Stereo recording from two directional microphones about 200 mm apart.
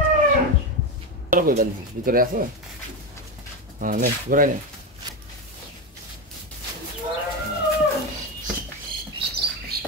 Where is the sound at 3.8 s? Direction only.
45° right (ahead or behind).